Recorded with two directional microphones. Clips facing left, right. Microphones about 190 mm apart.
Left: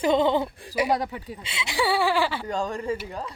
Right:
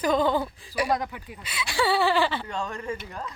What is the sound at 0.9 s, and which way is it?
Speech, 35° left (ahead or behind).